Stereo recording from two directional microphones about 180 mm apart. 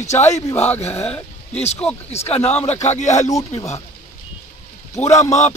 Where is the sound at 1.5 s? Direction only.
35° left (ahead or behind).